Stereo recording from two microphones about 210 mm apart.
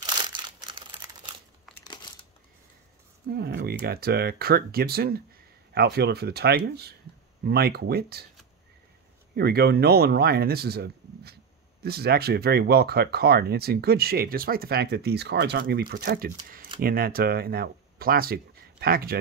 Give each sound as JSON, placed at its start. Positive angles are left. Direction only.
{"t": 0.6, "sound": "computer keyboard", "side_deg": -20}
{"t": 1.7, "sound": "crumpling", "side_deg": 0}
{"t": 3.3, "sound": "speech", "side_deg": -50}
{"t": 9.3, "sound": "speech", "side_deg": -50}